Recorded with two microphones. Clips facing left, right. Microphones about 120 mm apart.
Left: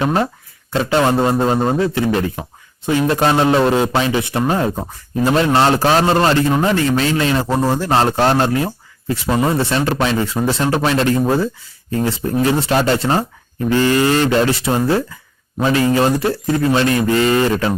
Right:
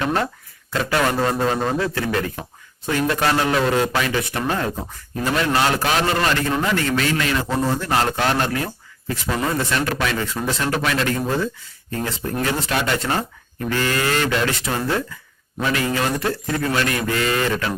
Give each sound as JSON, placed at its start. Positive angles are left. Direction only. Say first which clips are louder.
{"t": 0.0, "sound": "a man's voice", "louder": "left 4 dB", "side_deg": 25}